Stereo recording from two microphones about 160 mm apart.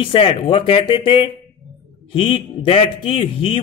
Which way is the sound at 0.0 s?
35° left (ahead or behind).